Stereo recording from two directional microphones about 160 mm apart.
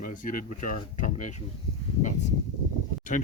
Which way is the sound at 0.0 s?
60° left (ahead or behind).